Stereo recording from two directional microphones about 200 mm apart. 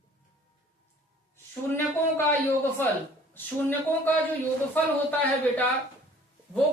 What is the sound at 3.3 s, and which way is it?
Speech, 10° left (ahead or behind).